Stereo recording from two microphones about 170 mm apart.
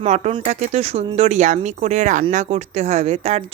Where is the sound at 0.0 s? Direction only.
40° right (ahead or behind).